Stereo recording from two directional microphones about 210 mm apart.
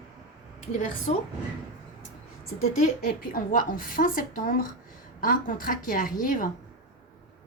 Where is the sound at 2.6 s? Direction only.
40° left (ahead or behind).